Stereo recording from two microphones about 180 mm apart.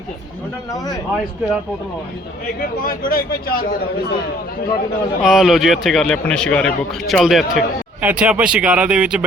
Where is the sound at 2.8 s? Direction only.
55° left (ahead or behind).